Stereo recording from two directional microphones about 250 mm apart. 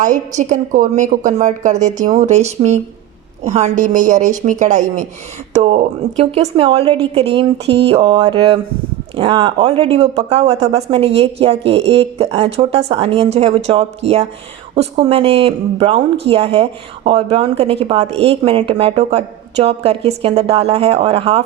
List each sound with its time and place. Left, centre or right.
0.0 s a woman's voice: right